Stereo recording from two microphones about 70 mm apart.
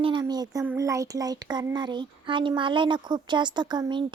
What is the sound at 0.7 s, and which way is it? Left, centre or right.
A child's voice, right.